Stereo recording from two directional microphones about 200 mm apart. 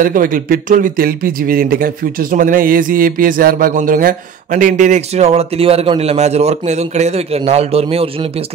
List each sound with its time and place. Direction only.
0.0 s speech: 45° right (ahead or behind)